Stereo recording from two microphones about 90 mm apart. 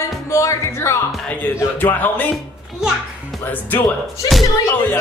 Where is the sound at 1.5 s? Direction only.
20° left (ahead or behind).